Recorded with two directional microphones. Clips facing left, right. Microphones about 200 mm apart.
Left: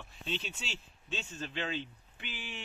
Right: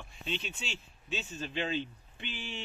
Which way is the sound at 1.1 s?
10° right (ahead or behind).